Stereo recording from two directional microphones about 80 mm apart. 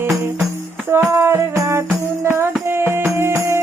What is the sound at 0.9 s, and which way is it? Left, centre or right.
Music, right.